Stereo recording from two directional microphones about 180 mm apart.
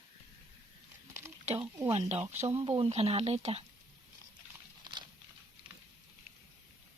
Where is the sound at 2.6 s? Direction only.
30° right (ahead or behind).